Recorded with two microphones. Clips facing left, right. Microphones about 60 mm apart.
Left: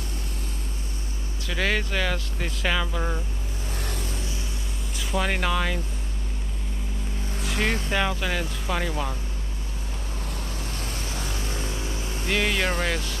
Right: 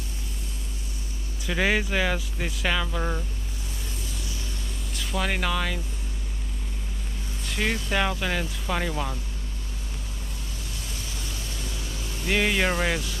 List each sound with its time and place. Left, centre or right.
1.4 s speech: centre
3.9 s vehicle: left
4.9 s speech: centre
7.4 s vehicle: centre
7.9 s speech: centre
10.6 s vehicle: left
12.3 s speech: centre